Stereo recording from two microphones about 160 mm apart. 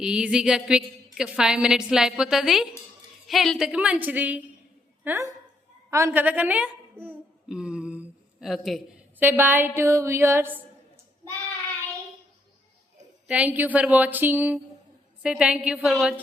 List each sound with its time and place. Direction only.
0.0 s a woman's voice: 5° right (ahead or behind)
13.2 s a woman's voice: 10° right (ahead or behind)